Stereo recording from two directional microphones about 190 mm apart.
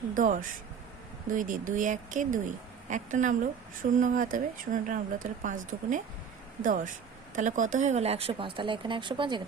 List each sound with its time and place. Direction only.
0.2 s a woman's voice: 45° right (ahead or behind); by 9.4 s 25° right (ahead or behind)